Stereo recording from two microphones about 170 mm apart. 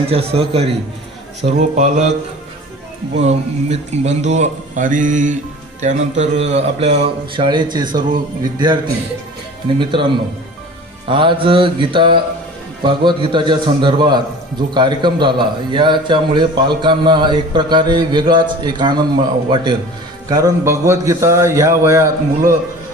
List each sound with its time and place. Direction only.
0.1 s speech: 35° right (ahead or behind)
3.2 s a man's voice: 40° right (ahead or behind)
11.1 s a man's voice: 30° right (ahead or behind)